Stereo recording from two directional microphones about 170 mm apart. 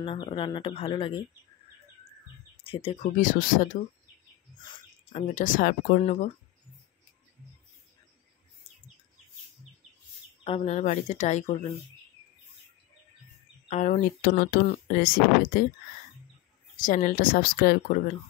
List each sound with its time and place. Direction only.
0.0 s speech: 30° left (ahead or behind)
2.6 s speech: 35° left (ahead or behind)
3.2 s speech: 50° left (ahead or behind)
4.6 s bird: 25° left (ahead or behind)
5.3 s speech: 50° left (ahead or behind)
10.4 s speech: 35° left (ahead or behind)
13.7 s speech: 45° left (ahead or behind)
14.2 s speech: 60° left (ahead or behind)
16.7 s speech: 50° left (ahead or behind)